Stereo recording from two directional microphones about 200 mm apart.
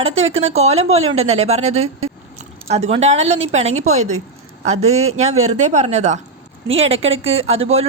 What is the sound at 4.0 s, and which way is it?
Speech, 90° right.